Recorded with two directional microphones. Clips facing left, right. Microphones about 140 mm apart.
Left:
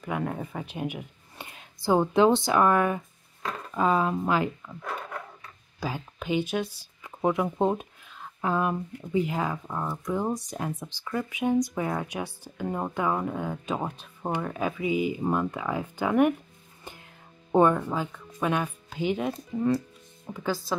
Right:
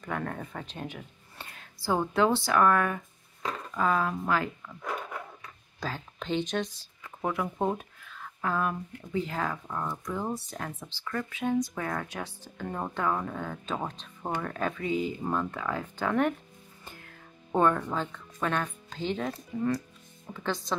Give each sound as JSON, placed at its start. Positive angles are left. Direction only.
{"t": 0.0, "sound": "speech", "side_deg": 10}
{"t": 5.8, "sound": "speech", "side_deg": 10}